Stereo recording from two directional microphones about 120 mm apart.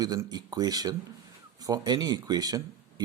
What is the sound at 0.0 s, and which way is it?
Speech, 30° right (ahead or behind).